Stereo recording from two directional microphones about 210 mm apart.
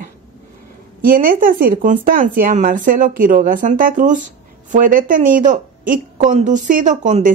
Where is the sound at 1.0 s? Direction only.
40° right (ahead or behind).